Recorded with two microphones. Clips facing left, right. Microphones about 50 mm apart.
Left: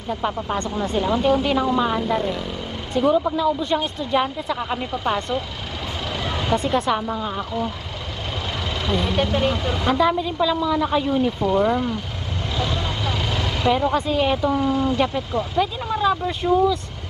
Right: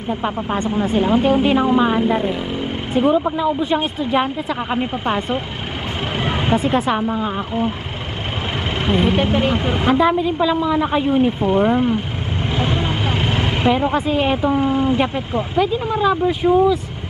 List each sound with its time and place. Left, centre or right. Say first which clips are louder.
0.9 s speech: right 3 dB; right
6.1 s vehicle: right 5 dB; right
6.9 s speech: right 3 dB; right
8.8 s a woman's voice: right 5 dB; right
12.5 s vehicle: right 4 dB; right
13.7 s speech: right 2 dB; right
15.6 s speech: right 5 dB; centre
16.4 s speech: right 3 dB; right